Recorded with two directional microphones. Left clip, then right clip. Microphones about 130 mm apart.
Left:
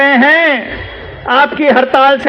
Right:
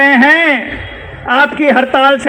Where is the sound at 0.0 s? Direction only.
30° left (ahead or behind).